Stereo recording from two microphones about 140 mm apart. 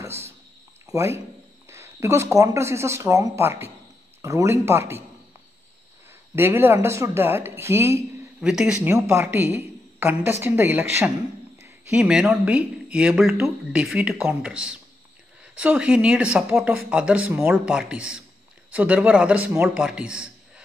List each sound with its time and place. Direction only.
0.0 s a sound: 20° right (ahead or behind)
0.8 s speech: 20° right (ahead or behind)
6.3 s speech: 15° right (ahead or behind)
8.4 s speech: 5° right (ahead or behind)
8.9 s speech: 20° right (ahead or behind)
11.6 s speech: 5° right (ahead or behind)